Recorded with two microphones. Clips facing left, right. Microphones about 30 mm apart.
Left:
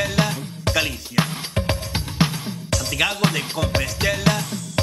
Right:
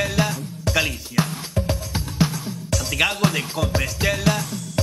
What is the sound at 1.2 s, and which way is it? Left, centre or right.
Music, left.